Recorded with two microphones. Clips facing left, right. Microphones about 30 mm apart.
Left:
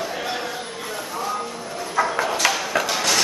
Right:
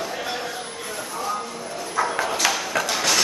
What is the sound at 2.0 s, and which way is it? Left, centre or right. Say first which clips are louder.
Dog: left 2 dB; centre.